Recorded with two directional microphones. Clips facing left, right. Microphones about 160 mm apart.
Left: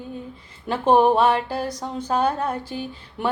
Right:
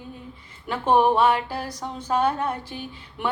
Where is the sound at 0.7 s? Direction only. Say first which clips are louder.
Left 3 dB; 30° left (ahead or behind).